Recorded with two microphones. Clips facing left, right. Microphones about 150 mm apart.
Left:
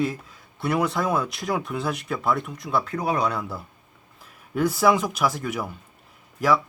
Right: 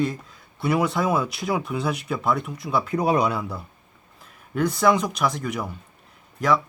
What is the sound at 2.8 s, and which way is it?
Speech, 20° right (ahead or behind).